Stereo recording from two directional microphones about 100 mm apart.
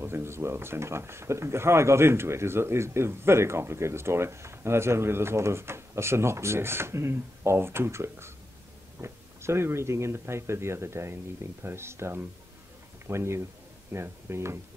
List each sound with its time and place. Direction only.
0.0 s speech: 25° right (ahead or behind)